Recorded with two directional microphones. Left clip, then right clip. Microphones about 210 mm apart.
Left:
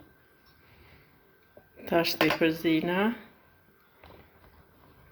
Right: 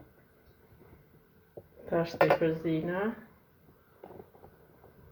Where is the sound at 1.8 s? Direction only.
45° left (ahead or behind).